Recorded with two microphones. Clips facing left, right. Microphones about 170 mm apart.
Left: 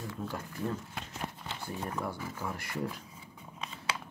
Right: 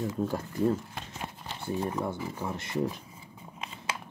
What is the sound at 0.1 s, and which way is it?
Speech, 40° right (ahead or behind).